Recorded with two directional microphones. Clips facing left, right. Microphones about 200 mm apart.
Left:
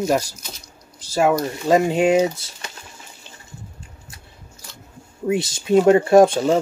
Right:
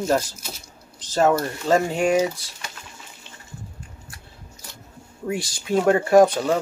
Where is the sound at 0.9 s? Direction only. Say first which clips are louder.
Left 1 dB; 10° left (ahead or behind).